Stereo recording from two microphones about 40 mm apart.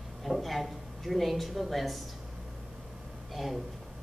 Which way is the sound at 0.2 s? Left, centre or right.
Centre.